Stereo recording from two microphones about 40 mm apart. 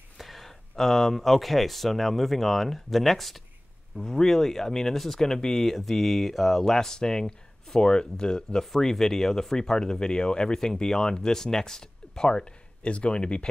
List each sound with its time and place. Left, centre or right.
0.2 s speech: centre; by 8.6 s left
8.7 s speech: centre
12.8 s speech: left